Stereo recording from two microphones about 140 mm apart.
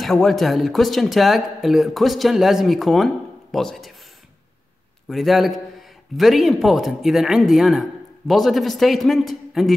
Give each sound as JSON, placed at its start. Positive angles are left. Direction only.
{"t": 0.0, "sound": "a man's voice", "side_deg": 0}
{"t": 5.1, "sound": "a man's voice", "side_deg": 0}